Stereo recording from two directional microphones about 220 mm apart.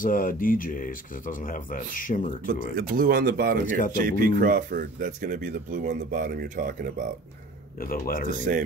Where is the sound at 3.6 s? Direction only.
35° left (ahead or behind).